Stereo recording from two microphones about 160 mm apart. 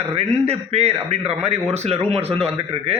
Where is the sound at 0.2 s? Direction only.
40° right (ahead or behind).